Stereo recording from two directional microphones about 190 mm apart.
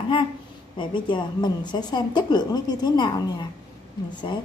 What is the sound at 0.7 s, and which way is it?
A woman's voice, 25° left (ahead or behind).